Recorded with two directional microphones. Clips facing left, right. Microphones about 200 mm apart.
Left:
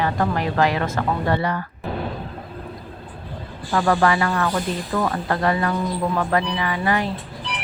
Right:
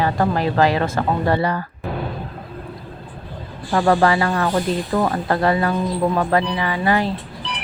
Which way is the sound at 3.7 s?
30° right (ahead or behind).